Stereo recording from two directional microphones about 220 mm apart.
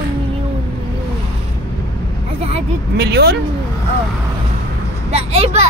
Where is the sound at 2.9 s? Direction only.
45° right (ahead or behind).